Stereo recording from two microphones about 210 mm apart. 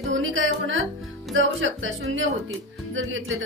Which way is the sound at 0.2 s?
65° right (ahead or behind).